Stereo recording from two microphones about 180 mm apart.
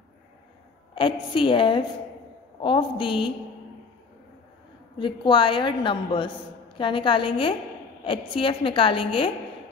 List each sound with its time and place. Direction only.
0.9 s a woman's voice: 25° left (ahead or behind)
4.9 s a woman's voice: 25° left (ahead or behind)